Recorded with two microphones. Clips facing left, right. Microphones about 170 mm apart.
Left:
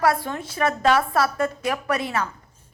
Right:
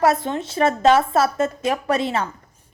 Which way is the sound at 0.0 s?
25° right (ahead or behind).